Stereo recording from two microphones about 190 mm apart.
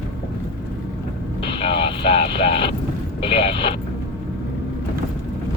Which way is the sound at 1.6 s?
30° left (ahead or behind).